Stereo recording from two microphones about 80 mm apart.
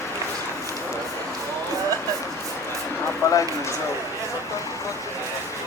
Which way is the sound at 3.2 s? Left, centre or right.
Left.